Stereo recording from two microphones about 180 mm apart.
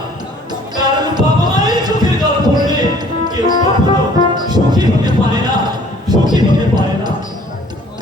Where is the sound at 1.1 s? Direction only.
25° right (ahead or behind).